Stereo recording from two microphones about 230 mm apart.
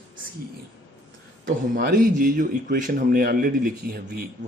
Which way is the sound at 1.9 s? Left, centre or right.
Right.